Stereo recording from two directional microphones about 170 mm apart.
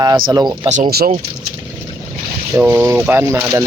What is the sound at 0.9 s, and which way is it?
Speech, 65° right (ahead or behind).